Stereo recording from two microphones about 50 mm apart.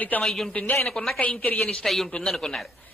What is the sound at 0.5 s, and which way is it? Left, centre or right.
Speech, left.